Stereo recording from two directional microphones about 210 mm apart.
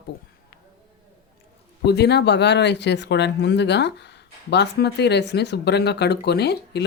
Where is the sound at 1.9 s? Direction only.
50° left (ahead or behind).